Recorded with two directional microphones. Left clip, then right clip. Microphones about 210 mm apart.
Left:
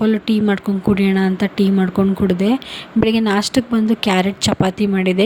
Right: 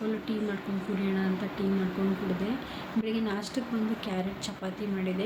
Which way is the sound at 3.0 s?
50° left (ahead or behind).